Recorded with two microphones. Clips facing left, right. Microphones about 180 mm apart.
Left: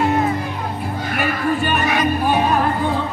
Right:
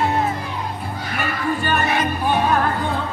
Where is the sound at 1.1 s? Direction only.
10° left (ahead or behind).